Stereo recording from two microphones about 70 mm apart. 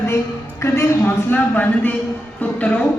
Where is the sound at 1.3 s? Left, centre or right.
Left.